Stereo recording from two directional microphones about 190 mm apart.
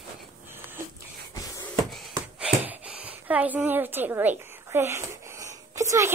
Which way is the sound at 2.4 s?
5° right (ahead or behind).